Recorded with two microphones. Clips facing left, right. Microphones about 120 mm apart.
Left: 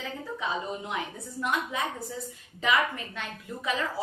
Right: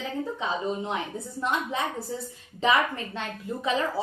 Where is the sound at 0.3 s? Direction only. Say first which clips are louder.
Even; 30° right (ahead or behind).